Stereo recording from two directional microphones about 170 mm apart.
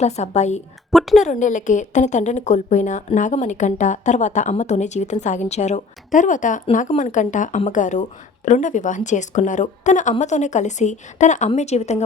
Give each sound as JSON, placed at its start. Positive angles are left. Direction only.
{"t": 0.0, "sound": "a woman's voice", "side_deg": 40}
{"t": 0.9, "sound": "a sound", "side_deg": 0}
{"t": 1.2, "sound": "a woman's voice", "side_deg": 45}